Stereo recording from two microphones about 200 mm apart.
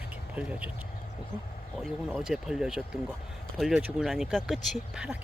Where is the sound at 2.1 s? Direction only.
5° right (ahead or behind).